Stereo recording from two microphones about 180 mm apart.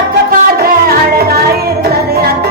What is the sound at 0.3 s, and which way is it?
Music, 60° right (ahead or behind).